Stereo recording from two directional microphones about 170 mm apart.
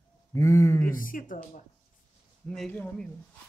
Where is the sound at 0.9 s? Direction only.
55° left (ahead or behind).